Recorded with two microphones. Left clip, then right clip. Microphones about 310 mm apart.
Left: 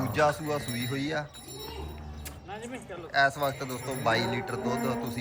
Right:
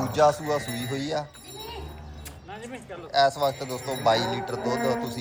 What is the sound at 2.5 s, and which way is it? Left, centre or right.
Speech, centre.